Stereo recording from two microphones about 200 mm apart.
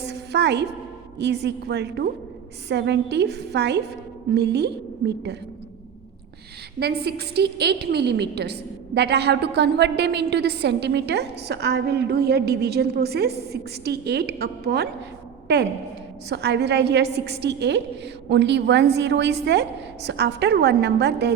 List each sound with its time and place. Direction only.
0.0 s a sound: 55° right (ahead or behind)
1.2 s a woman's voice: 55° right (ahead or behind)
6.7 s a woman's voice: 55° right (ahead or behind)